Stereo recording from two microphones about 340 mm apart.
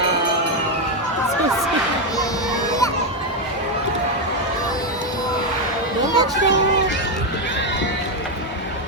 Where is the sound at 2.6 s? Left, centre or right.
Centre.